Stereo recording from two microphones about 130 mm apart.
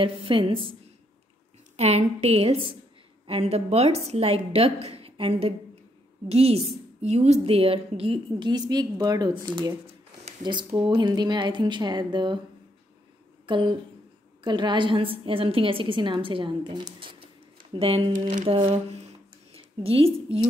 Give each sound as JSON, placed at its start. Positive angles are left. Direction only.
{"t": 0.0, "sound": "a woman's voice", "side_deg": -40}
{"t": 1.8, "sound": "a woman's voice", "side_deg": -55}
{"t": 7.4, "sound": "a woman's voice", "side_deg": -45}
{"t": 13.5, "sound": "a woman's voice", "side_deg": -35}
{"t": 18.2, "sound": "speech", "side_deg": -75}
{"t": 18.5, "sound": "a woman's voice", "side_deg": -50}